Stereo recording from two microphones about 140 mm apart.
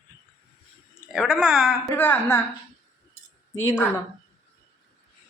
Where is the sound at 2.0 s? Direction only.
15° left (ahead or behind).